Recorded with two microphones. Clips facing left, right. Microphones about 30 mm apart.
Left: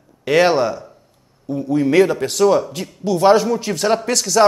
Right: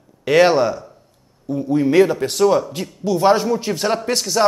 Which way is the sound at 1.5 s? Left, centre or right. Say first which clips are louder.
Even; left.